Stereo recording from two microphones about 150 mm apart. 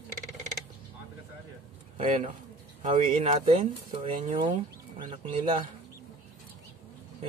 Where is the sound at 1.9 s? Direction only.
55° right (ahead or behind).